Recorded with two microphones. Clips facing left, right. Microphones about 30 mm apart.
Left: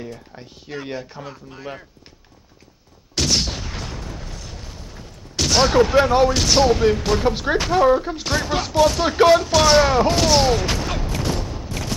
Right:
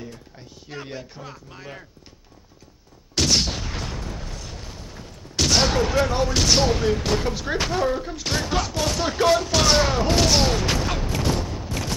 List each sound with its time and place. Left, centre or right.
0.9 s speech: centre
3.2 s a sound: centre
6.0 s speech: centre
6.3 s speech: centre
7.2 s speech: left
8.3 s speech: centre
11.8 s a sound: centre